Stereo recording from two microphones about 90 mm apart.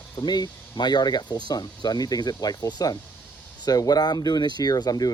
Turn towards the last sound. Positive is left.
turn(degrees=45)  # may be behind; listen again after turning